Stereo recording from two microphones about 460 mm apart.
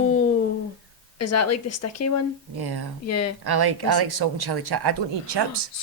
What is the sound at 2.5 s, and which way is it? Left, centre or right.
Speech, right.